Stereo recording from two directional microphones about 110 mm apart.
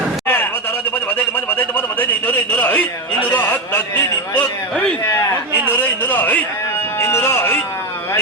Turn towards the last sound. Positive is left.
turn(degrees=25)  # may be behind; listen again after turning